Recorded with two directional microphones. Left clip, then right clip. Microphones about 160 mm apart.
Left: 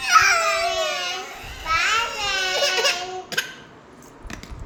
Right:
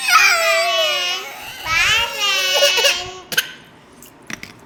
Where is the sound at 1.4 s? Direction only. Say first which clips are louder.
Right 5 dB; 35° right (ahead or behind).